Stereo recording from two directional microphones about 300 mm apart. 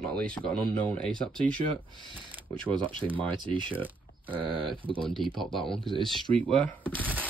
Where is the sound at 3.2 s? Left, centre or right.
Centre.